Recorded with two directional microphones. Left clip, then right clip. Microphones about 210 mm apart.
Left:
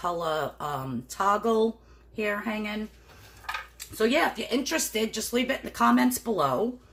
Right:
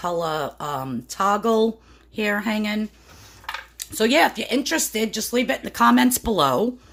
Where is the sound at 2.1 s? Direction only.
50° right (ahead or behind).